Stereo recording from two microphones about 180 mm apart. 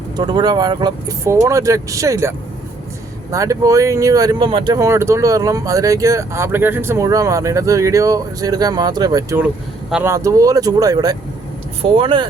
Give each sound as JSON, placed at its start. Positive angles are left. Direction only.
{"t": 0.2, "sound": "speech", "side_deg": -25}
{"t": 3.3, "sound": "speech", "side_deg": -20}